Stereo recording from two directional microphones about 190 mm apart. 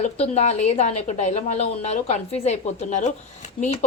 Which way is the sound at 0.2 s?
35° left (ahead or behind).